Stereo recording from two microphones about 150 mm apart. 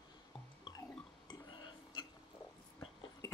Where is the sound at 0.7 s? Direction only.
30° left (ahead or behind).